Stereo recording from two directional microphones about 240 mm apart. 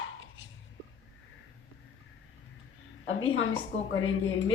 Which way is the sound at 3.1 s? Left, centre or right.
Left.